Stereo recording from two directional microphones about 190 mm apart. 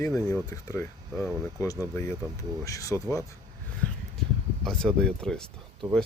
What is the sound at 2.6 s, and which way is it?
Speech, 15° left (ahead or behind).